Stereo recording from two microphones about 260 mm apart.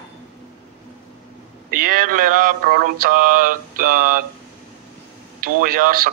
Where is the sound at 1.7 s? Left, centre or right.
Right.